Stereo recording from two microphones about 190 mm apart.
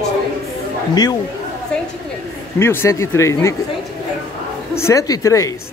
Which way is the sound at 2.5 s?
15° left (ahead or behind).